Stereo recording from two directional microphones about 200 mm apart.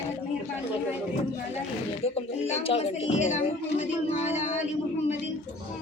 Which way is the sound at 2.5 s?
30° left (ahead or behind).